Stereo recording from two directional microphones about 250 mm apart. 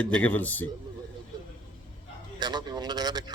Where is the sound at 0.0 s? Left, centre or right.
Centre.